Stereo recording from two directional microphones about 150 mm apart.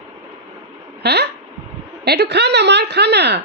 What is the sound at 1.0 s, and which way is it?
Speech, 90° right.